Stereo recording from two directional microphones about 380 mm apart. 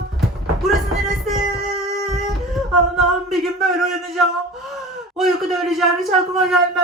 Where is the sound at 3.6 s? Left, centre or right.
Centre.